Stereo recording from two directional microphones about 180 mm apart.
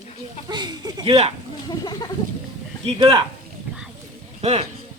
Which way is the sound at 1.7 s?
20° left (ahead or behind).